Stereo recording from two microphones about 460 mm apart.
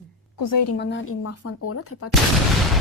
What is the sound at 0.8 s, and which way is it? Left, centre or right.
Speech, left.